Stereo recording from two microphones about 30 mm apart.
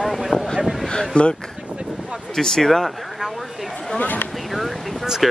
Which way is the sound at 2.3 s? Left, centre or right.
Centre.